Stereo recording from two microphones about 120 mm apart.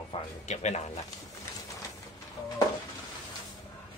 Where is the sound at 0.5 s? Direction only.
70° left (ahead or behind).